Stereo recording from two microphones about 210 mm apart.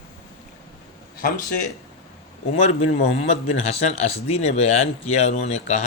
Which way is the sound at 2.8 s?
30° left (ahead or behind).